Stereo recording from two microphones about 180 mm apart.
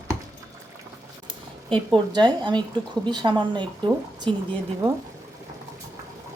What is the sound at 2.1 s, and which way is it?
A woman's voice, 25° right (ahead or behind).